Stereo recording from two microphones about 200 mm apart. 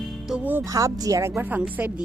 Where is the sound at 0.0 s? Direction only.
Centre (ahead or behind).